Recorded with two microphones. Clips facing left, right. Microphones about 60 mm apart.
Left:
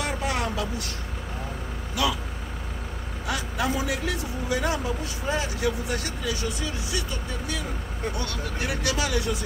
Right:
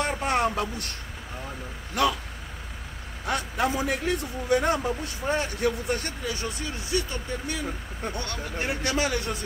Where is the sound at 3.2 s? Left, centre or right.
Right.